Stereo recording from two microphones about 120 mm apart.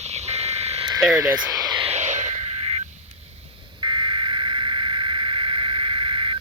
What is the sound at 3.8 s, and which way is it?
Vehicle, 40° right (ahead or behind).